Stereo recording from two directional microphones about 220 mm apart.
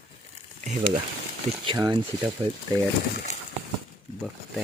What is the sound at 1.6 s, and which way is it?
Speech, 20° right (ahead or behind).